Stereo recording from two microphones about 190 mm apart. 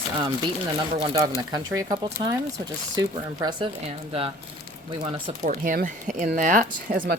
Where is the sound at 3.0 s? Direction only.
20° right (ahead or behind).